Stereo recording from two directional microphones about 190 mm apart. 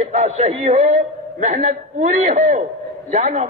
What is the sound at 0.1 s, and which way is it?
A man's voice, 40° right (ahead or behind).